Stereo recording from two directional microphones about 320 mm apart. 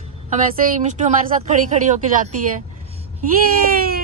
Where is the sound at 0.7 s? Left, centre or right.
Right.